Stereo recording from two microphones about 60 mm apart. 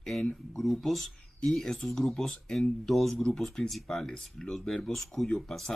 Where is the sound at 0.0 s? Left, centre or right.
Centre.